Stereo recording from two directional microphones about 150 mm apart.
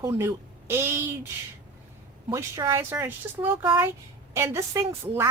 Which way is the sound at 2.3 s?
20° right (ahead or behind).